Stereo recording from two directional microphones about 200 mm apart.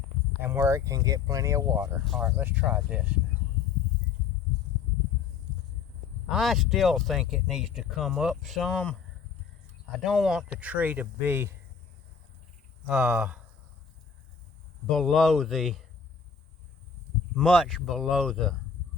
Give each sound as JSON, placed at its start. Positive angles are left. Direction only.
{"t": 0.4, "sound": "speech", "side_deg": -10}
{"t": 2.0, "sound": "speech", "side_deg": 0}
{"t": 6.2, "sound": "speech", "side_deg": 0}
{"t": 12.9, "sound": "speech", "side_deg": -5}
{"t": 14.8, "sound": "speech", "side_deg": 0}
{"t": 17.3, "sound": "speech", "side_deg": 0}